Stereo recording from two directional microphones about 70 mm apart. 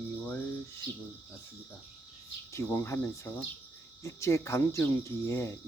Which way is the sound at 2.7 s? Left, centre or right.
Left.